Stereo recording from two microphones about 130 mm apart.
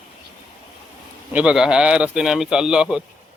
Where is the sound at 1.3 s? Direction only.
10° right (ahead or behind).